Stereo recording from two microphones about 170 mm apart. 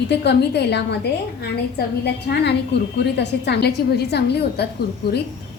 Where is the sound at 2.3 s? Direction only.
75° left (ahead or behind).